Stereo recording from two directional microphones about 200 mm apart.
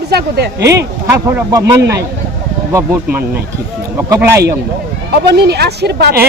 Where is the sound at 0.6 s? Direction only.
15° right (ahead or behind).